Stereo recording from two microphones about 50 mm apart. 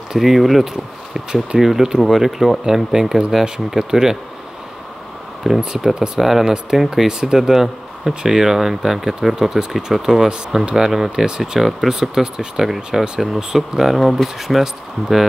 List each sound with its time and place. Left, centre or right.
0.1 s speech: centre
5.6 s speech: centre
6.2 s speech: centre
10.6 s speech: right